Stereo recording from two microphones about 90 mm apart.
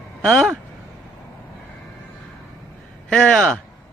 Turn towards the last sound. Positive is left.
turn(degrees=10)  # may be behind; listen again after turning